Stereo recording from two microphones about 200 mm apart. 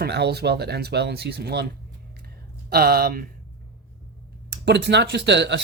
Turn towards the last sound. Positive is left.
turn(degrees=-60)  # may be behind; listen again after turning